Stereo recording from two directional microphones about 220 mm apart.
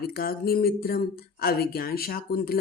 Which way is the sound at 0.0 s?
45° left (ahead or behind).